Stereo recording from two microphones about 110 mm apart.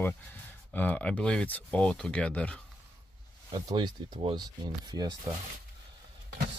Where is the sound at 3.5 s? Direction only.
40° right (ahead or behind).